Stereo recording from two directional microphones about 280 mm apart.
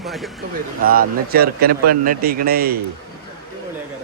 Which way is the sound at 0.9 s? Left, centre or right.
Right.